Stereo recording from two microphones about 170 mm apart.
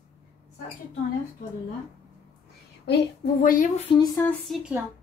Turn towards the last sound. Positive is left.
turn(degrees=0)  # may be behind; listen again after turning